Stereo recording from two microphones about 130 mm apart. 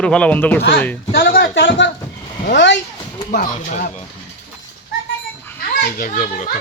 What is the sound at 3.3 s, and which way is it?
Speech, 85° left.